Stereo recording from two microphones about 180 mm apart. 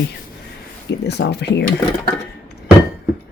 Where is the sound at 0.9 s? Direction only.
65° left (ahead or behind).